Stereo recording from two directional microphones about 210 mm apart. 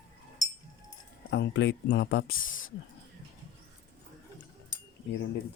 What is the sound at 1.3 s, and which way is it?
Speech, 55° left (ahead or behind).